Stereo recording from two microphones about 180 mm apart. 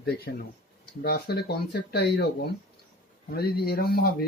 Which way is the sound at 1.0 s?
65° left (ahead or behind).